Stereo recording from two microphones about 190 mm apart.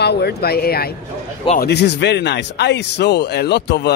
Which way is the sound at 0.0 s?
60° left (ahead or behind).